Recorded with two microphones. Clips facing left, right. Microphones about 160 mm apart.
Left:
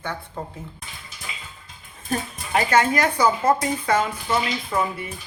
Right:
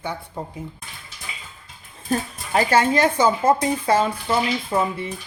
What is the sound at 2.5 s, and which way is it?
Speech, 30° right (ahead or behind).